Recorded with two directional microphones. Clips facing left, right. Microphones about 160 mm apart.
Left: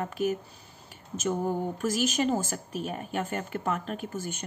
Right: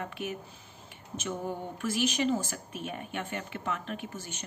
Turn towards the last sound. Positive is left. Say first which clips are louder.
# left 6 dB
turn(degrees=50)  # may be behind; listen again after turning